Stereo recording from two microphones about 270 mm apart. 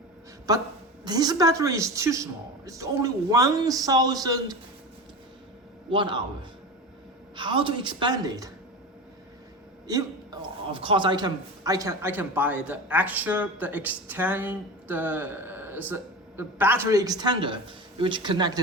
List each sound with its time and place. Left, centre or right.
0.5 s a man's voice: centre
5.9 s a man's voice: centre
7.3 s a man's voice: centre
10.7 s a man's voice: centre